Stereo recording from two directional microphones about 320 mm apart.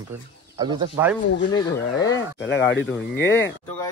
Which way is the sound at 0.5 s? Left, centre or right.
Centre.